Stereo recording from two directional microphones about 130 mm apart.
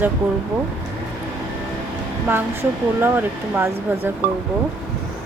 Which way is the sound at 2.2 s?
15° right (ahead or behind).